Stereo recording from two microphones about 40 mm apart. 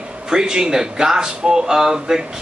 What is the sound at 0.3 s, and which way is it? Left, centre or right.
Speech, centre.